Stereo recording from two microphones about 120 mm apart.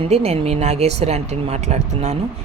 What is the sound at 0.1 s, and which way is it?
A man's voice, 60° right (ahead or behind).